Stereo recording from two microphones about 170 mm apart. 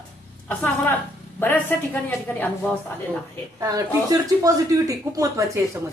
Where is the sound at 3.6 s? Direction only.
20° right (ahead or behind).